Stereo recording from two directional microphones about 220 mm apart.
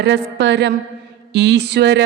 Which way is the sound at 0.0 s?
50° right (ahead or behind).